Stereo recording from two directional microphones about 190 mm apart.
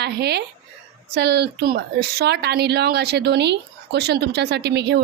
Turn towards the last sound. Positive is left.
turn(degrees=-60)  # may be behind; listen again after turning